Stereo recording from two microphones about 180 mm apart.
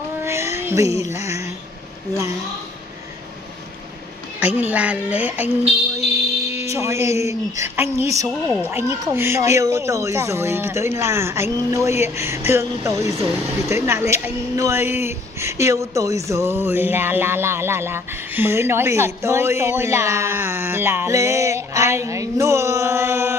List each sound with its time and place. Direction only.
0.2 s child singing: 15° right (ahead or behind)
0.9 s a sound: 15° right (ahead or behind)
4.4 s a woman's voice: 10° right (ahead or behind)
5.9 s music: 35° left (ahead or behind)
6.6 s a woman's voice: 15° right (ahead or behind)